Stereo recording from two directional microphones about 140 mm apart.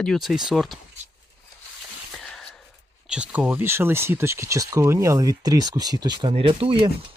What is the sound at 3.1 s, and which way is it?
Speech, 10° right (ahead or behind).